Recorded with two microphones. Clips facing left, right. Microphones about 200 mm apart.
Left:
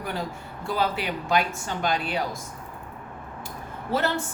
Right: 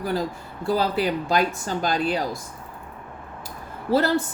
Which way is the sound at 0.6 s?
35° right (ahead or behind).